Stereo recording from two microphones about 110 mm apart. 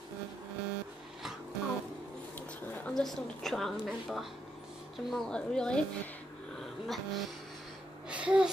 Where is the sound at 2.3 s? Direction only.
15° left (ahead or behind).